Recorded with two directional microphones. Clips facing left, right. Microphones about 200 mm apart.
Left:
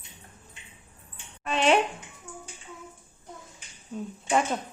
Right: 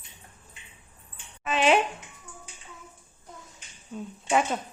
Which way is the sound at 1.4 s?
5° right (ahead or behind).